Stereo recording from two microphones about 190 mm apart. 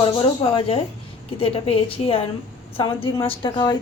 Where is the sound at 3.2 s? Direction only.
25° left (ahead or behind).